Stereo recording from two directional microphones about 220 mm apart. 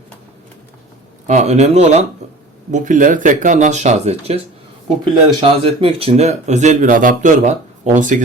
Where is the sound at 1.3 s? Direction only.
30° right (ahead or behind).